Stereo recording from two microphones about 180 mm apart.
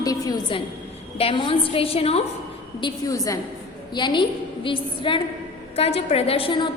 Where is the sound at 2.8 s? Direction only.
20° left (ahead or behind).